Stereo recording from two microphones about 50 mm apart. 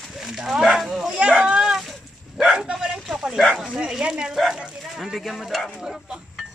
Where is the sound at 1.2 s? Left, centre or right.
Centre.